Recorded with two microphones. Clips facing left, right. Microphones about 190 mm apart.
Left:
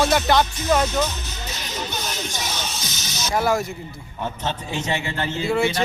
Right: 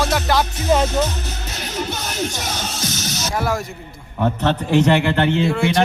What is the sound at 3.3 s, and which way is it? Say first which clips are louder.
Speech: left 2 dB; centre (ahead or behind).